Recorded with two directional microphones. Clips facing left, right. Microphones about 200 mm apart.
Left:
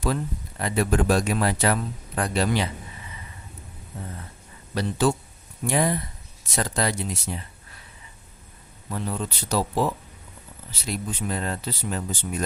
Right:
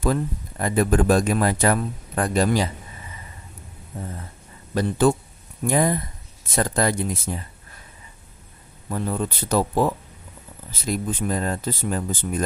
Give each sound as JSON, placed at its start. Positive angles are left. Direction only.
{"t": 0.6, "sound": "speech", "side_deg": -50}
{"t": 4.7, "sound": "speech", "side_deg": -50}
{"t": 8.9, "sound": "speech", "side_deg": -50}